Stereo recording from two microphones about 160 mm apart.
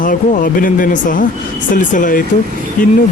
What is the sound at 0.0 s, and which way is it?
Speech, 55° left (ahead or behind).